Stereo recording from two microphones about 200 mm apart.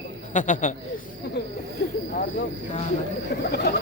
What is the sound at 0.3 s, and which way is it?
Speech, 40° left (ahead or behind).